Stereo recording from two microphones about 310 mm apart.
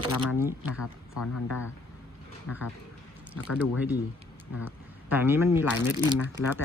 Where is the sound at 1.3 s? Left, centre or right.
Left.